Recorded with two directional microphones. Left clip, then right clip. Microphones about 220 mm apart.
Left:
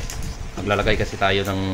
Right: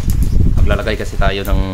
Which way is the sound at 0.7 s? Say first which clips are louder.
Even; 35° right (ahead or behind).